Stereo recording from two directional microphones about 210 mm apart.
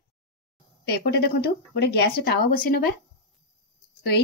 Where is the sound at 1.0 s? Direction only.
50° left (ahead or behind).